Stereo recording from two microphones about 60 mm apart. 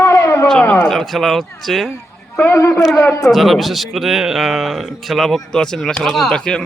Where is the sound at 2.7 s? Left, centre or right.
Centre.